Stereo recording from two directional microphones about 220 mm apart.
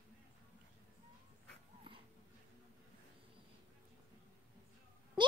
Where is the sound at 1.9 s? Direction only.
20° right (ahead or behind).